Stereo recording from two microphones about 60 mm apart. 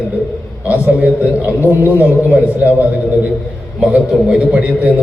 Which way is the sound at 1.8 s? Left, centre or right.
Right.